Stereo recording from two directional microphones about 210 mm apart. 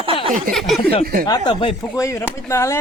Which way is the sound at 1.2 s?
20° left (ahead or behind).